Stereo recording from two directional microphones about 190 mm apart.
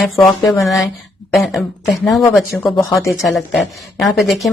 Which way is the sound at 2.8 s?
15° left (ahead or behind).